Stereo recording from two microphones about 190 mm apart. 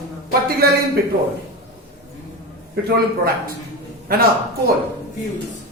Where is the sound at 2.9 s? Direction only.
50° right (ahead or behind).